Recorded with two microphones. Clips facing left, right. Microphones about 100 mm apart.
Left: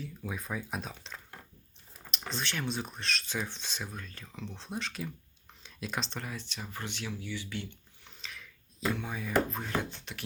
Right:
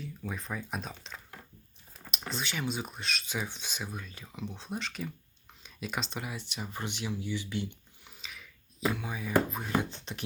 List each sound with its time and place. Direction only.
0.0 s speech: centre (ahead or behind); by 8.1 s 20° right (ahead or behind)
8.1 s music: 5° right (ahead or behind)
9.3 s speech: 5° right (ahead or behind)
9.7 s speech: 20° right (ahead or behind)